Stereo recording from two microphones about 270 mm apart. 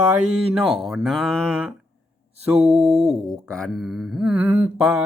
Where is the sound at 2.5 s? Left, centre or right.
Right.